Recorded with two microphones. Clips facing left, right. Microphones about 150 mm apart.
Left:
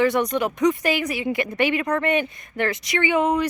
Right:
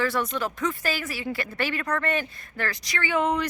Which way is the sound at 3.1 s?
10° left (ahead or behind).